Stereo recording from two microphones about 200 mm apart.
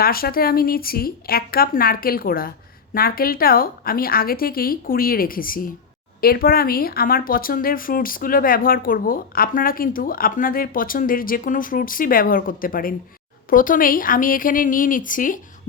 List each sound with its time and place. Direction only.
0.0 s speech: 50° left (ahead or behind)